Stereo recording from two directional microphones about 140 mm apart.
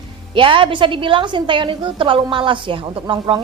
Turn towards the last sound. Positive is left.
turn(degrees=-35)  # may be behind; listen again after turning